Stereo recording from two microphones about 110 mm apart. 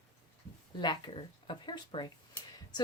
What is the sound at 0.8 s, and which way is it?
Speech, 45° left (ahead or behind).